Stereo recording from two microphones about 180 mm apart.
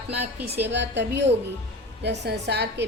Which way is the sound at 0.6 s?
75° right (ahead or behind).